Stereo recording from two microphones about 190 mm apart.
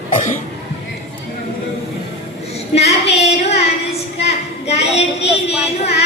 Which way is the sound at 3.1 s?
35° left (ahead or behind).